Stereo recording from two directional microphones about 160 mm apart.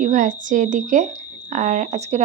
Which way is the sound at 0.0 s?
55° right (ahead or behind).